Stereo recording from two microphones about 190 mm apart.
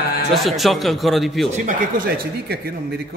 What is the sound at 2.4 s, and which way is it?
Speech, 55° right (ahead or behind).